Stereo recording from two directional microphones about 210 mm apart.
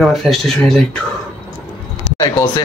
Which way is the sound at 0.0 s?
Centre (ahead or behind).